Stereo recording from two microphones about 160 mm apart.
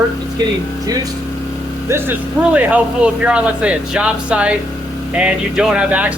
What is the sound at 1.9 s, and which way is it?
Speech, 10° right (ahead or behind).